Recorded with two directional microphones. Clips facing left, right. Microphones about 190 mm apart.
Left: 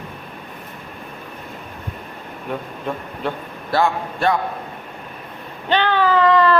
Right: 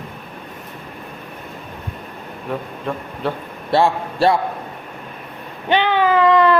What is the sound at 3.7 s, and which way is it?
Speech, 30° right (ahead or behind).